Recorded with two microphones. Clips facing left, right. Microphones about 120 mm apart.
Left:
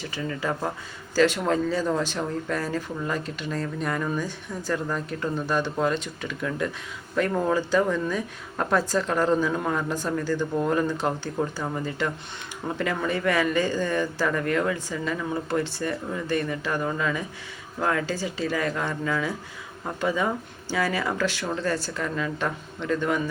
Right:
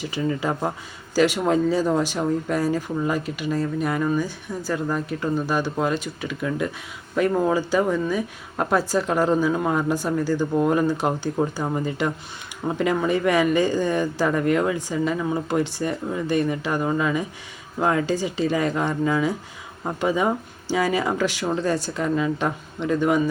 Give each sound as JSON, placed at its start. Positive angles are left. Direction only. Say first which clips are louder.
{"t": 0.0, "sound": "speech", "louder": "right 5 dB", "side_deg": -15}